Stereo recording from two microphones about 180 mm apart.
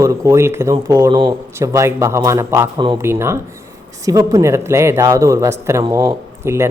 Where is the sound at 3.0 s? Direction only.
15° right (ahead or behind).